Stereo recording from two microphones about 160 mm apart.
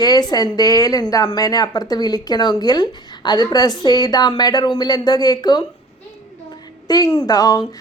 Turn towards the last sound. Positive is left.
turn(degrees=25)  # may be behind; listen again after turning